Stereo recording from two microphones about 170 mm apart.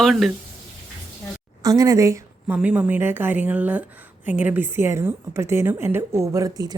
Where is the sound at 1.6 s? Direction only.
20° right (ahead or behind).